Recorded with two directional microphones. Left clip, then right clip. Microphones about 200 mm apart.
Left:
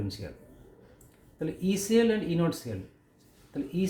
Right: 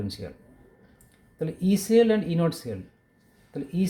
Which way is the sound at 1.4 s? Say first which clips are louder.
Right 3 dB; 50° right (ahead or behind).